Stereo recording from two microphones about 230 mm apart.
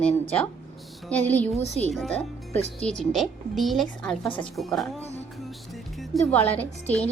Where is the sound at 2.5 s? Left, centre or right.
Right.